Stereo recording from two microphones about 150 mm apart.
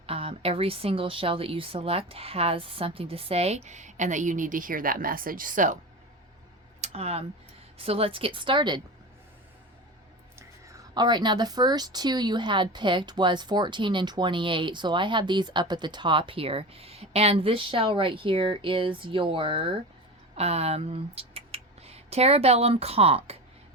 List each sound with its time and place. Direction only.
0.0 s a woman's voice: 40° right (ahead or behind); by 5.7 s 60° right (ahead or behind)
6.8 s a woman's voice: 45° right (ahead or behind)
10.3 s a woman's voice: 25° right (ahead or behind); by 23.4 s 40° right (ahead or behind)